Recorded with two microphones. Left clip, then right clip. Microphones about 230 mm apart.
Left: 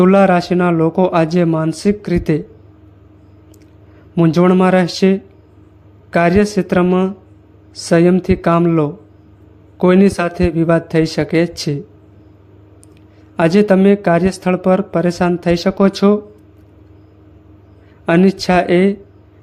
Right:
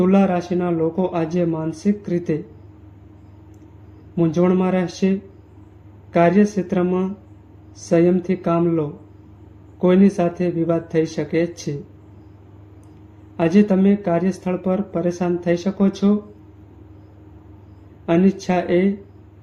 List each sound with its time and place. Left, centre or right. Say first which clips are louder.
0.0 s speech: left 8 dB; left
4.1 s speech: left 6 dB; left
13.3 s speech: left 6 dB; left
18.0 s speech: left 6 dB; left